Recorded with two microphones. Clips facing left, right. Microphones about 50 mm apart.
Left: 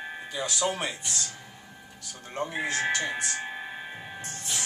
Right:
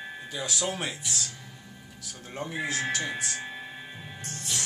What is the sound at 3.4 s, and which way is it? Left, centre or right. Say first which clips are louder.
Music: left 3 dB; centre.